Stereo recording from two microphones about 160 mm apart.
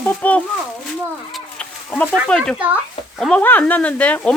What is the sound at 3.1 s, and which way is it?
Speech, centre (ahead or behind).